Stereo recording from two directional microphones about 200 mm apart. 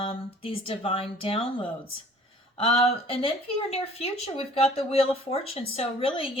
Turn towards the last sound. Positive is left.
turn(degrees=25)  # may be behind; listen again after turning